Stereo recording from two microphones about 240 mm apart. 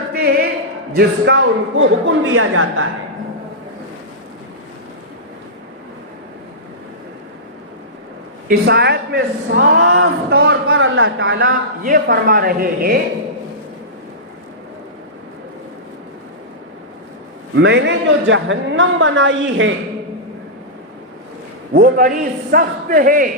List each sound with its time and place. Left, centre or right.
0.1 s a sound: right
0.9 s a woman's voice: right
1.8 s a woman's voice: right
8.4 s a woman's voice: right
10.7 s a woman's voice: right
11.3 s speech: right
17.5 s a woman's voice: right
21.7 s speech: right